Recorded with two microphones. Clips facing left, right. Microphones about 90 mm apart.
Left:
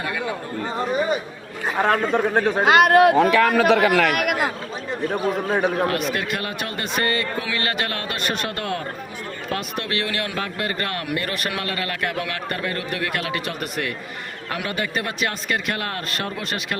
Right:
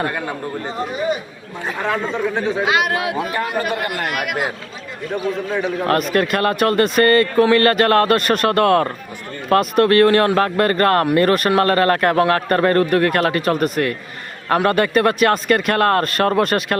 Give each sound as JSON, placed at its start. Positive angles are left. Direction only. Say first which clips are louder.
{"t": 0.0, "sound": "speech", "louder": "right 3 dB", "side_deg": -50}
{"t": 1.8, "sound": "a man's voice", "louder": "left 2 dB", "side_deg": 50}
{"t": 3.2, "sound": "a man's voice", "louder": "left 5 dB", "side_deg": 65}
{"t": 5.9, "sound": "speech", "louder": "right 7 dB", "side_deg": -45}
{"t": 9.5, "sound": "speech", "louder": "right 14 dB", "side_deg": -50}